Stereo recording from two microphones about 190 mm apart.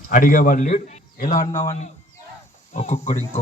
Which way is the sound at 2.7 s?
35° left (ahead or behind).